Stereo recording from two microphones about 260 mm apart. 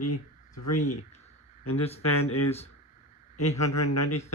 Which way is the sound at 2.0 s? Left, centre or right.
Left.